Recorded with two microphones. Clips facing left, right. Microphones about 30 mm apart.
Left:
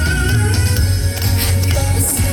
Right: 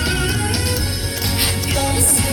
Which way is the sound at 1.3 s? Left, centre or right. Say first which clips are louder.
Right 2 dB; right.